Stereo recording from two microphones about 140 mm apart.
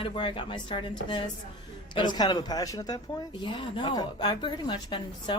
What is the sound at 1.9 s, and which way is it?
Speech, 30° left (ahead or behind).